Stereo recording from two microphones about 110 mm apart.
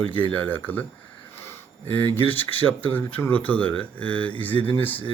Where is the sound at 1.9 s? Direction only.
20° left (ahead or behind).